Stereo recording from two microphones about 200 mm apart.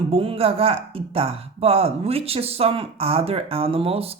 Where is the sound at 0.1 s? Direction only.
30° right (ahead or behind).